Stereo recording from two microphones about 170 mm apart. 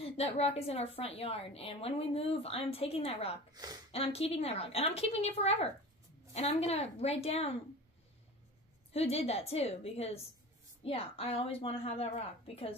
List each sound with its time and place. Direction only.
0.0 s a woman's voice: 35° left (ahead or behind)
3.5 s speech: 20° right (ahead or behind)
3.9 s a woman's voice: 35° left (ahead or behind)
8.9 s a woman's voice: 35° left (ahead or behind)